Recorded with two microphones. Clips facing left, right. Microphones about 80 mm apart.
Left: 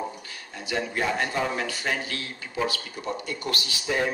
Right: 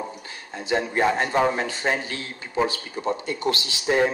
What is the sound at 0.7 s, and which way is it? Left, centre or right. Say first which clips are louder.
A man's voice: right 5 dB; right.